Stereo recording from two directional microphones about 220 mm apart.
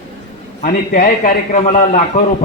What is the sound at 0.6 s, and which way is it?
A man's voice, 35° left (ahead or behind).